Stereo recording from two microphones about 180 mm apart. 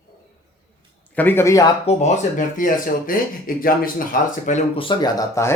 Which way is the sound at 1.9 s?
40° left (ahead or behind).